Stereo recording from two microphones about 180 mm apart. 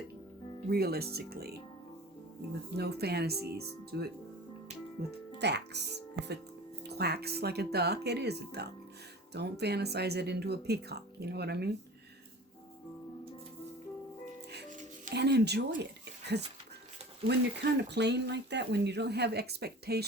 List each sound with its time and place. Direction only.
0.7 s speech: 60° right (ahead or behind)
2.6 s speech: 65° right (ahead or behind)
14.7 s music: 45° right (ahead or behind)
15.1 s speech: 65° right (ahead or behind)